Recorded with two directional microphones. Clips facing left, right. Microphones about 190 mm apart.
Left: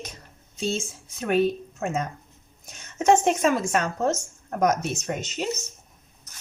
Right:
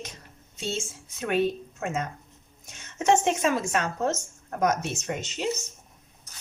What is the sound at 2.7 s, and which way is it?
Speech, 35° left (ahead or behind).